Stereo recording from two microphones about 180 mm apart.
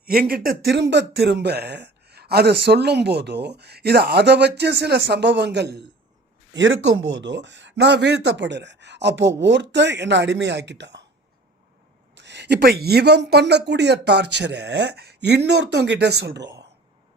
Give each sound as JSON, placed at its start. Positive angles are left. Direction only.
{"t": 0.0, "sound": "speech", "side_deg": -55}
{"t": 7.1, "sound": "speech", "side_deg": -90}
{"t": 12.1, "sound": "speech", "side_deg": -75}